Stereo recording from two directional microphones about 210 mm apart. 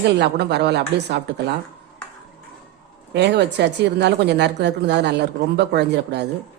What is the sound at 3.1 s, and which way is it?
Speech, 55° right (ahead or behind).